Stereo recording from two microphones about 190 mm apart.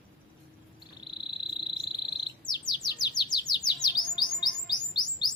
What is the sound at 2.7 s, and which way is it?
Chirp, 20° left (ahead or behind).